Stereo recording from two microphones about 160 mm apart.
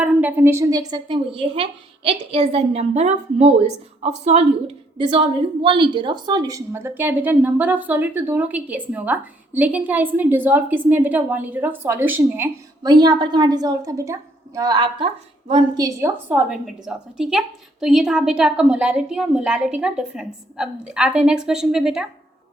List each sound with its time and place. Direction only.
0.0 s a woman's voice: 10° right (ahead or behind); by 4.4 s 40° right (ahead or behind)
4.9 s a woman's voice: 30° right (ahead or behind); by 12.5 s 15° right (ahead or behind)
12.8 s a woman's voice: 25° right (ahead or behind)
16.5 s a woman's voice: 5° right (ahead or behind)